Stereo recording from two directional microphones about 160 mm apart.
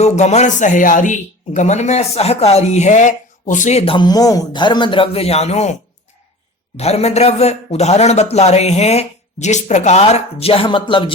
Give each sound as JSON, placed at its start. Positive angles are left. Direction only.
{"t": 0.0, "sound": "speech", "side_deg": 45}
{"t": 6.7, "sound": "speech", "side_deg": 40}